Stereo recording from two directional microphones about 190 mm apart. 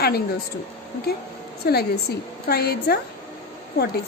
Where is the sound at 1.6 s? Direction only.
55° left (ahead or behind).